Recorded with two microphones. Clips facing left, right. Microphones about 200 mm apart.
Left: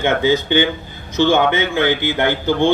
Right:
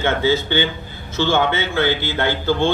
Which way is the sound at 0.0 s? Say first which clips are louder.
Left 2 dB; 15° left (ahead or behind).